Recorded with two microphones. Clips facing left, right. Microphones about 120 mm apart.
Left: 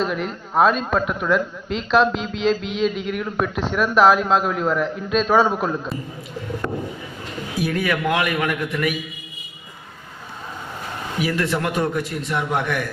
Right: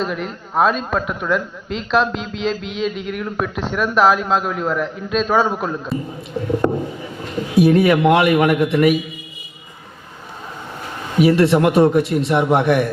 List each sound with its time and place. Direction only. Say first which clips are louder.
0.0 s a man's voice: even; centre (ahead or behind)
6.6 s a sound: right 8 dB; 35° right (ahead or behind)
7.5 s a man's voice: right 10 dB; 25° right (ahead or behind)
11.2 s a man's voice: right 10 dB; 25° right (ahead or behind)